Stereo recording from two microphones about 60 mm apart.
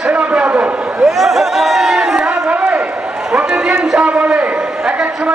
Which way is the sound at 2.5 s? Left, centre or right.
Right.